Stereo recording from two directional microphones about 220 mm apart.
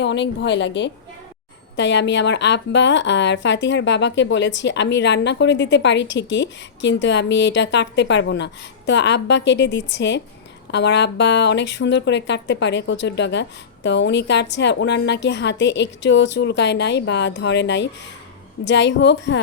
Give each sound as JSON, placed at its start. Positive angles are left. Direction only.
{"t": 0.0, "sound": "a woman's voice", "side_deg": 55}